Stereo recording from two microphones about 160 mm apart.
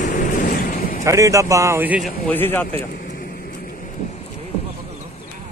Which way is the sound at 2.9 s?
60° left (ahead or behind).